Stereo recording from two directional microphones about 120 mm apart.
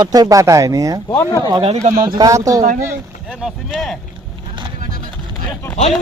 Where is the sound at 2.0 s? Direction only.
30° right (ahead or behind).